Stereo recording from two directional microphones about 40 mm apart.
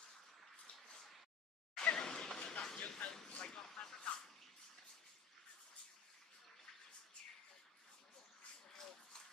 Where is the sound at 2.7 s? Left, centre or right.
Left.